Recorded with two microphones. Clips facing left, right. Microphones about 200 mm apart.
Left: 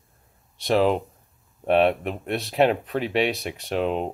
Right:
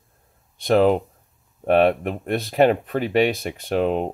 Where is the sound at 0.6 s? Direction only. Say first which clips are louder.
Right 4 dB; centre (ahead or behind).